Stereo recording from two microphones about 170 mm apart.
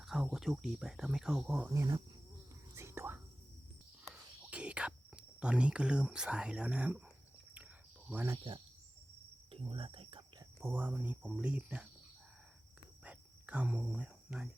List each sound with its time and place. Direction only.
0.0 s speech: 5° right (ahead or behind)
1.7 s speech: 20° right (ahead or behind)
2.7 s whispering: 15° right (ahead or behind)
8.1 s speech: 10° right (ahead or behind)
9.5 s cricket: 30° right (ahead or behind)
10.6 s speech: 15° right (ahead or behind)
13.1 s cricket: 5° right (ahead or behind)